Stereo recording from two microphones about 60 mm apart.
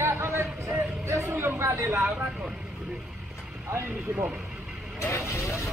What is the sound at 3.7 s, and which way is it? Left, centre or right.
Speech, right.